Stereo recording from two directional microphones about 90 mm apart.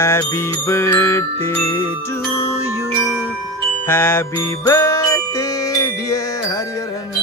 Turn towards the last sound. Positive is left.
turn(degrees=35)  # may be behind; listen again after turning